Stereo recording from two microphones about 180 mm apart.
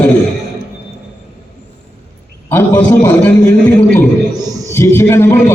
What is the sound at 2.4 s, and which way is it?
A man's voice, 15° left (ahead or behind).